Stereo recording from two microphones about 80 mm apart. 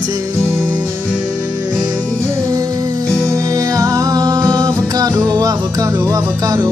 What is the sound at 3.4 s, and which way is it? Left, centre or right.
Music, right.